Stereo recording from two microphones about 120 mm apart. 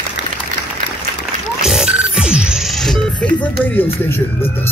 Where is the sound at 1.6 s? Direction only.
5° right (ahead or behind).